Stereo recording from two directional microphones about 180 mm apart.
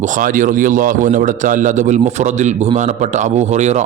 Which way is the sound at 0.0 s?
45° right (ahead or behind).